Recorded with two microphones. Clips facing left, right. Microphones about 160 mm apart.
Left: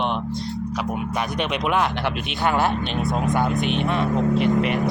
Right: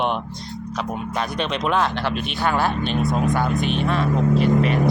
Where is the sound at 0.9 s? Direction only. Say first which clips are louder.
Right 2 dB; 15° left (ahead or behind).